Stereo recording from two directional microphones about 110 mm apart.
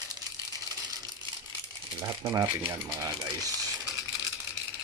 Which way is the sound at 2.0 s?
30° right (ahead or behind).